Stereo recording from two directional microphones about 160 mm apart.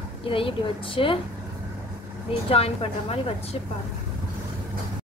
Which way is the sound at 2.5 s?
35° left (ahead or behind).